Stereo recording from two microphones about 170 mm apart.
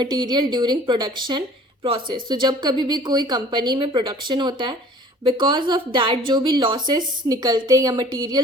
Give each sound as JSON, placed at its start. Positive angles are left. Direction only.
{"t": 0.0, "sound": "a woman's voice", "side_deg": -25}